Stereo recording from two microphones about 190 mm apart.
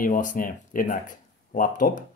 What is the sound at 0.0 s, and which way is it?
Speech, 45° left (ahead or behind).